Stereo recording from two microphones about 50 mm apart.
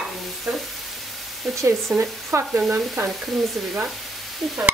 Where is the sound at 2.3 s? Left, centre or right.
Right.